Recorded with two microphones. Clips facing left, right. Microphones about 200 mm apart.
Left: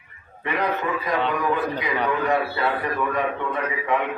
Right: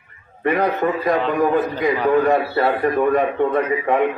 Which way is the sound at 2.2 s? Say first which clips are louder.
Right 5 dB; 45° right (ahead or behind).